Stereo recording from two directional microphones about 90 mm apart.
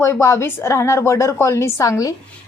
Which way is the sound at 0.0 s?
30° left (ahead or behind).